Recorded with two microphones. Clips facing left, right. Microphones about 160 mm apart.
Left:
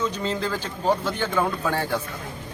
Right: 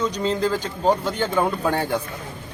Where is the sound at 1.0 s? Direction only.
15° right (ahead or behind).